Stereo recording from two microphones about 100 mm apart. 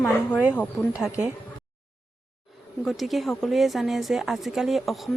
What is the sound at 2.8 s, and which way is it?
A woman's voice, centre (ahead or behind).